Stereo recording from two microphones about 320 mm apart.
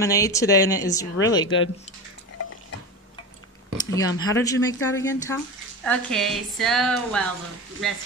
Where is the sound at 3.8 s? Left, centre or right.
Centre.